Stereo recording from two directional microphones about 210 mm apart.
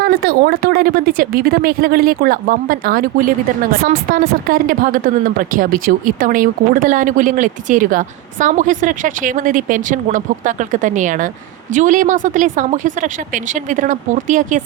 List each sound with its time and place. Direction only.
0.0 s a woman's voice: 45° right (ahead or behind)